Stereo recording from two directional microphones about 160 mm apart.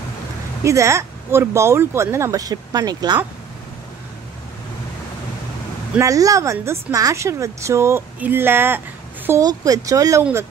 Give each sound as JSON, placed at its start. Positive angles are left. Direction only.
{"t": 0.7, "sound": "speech", "side_deg": -15}
{"t": 5.9, "sound": "speech", "side_deg": -20}